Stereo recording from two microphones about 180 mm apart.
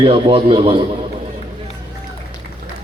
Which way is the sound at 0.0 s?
30° right (ahead or behind).